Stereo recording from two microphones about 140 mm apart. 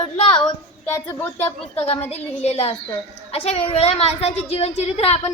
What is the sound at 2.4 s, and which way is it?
A woman's voice, 50° left (ahead or behind).